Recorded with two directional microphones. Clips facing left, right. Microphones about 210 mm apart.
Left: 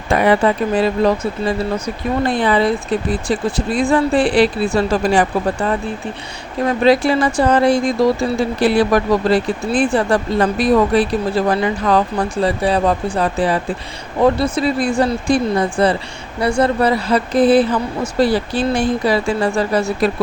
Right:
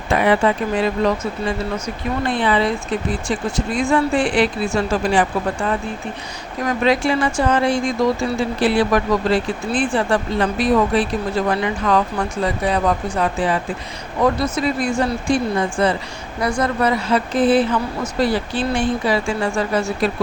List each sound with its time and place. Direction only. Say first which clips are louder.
0.1 s speech: left 2 dB; 40° left (ahead or behind)